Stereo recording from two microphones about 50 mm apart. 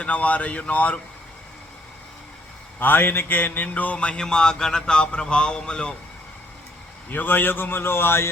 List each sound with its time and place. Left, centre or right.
0.0 s speech: left
2.7 s mantra: left
3.9 s a sound: left
7.1 s a man's voice: left